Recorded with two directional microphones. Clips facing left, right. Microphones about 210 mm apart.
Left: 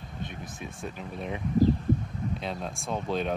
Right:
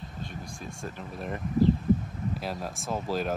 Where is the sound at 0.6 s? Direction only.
Centre (ahead or behind).